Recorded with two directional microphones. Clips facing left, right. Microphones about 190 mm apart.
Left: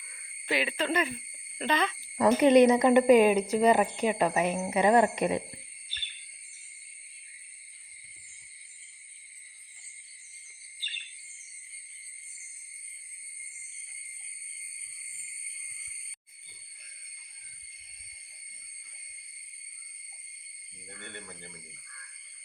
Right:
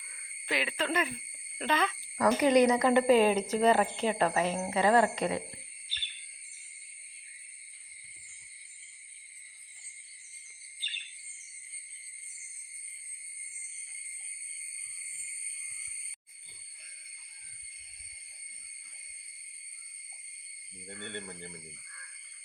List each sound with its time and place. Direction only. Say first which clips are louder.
0.4 s speech: left 3 dB; centre (ahead or behind)
2.1 s a woman's voice: left 4 dB; 25° left (ahead or behind)